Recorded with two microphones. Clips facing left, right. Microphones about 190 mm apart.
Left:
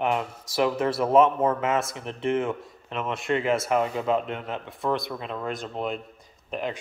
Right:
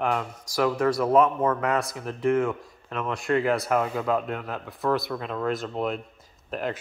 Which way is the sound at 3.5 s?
Centre (ahead or behind).